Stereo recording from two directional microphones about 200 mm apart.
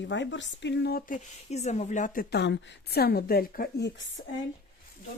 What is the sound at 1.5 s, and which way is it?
A woman's voice, 35° left (ahead or behind).